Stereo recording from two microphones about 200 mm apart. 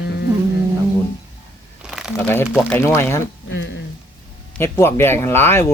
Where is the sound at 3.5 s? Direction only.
65° left (ahead or behind).